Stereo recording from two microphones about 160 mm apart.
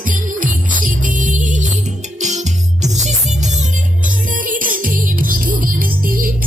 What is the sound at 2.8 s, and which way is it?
Music, 45° right (ahead or behind).